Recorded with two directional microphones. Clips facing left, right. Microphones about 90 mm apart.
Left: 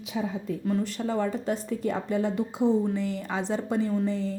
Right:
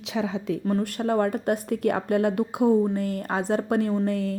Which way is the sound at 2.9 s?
50° right (ahead or behind).